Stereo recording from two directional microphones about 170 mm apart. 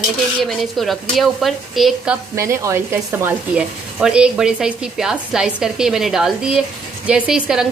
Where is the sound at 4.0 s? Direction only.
5° right (ahead or behind).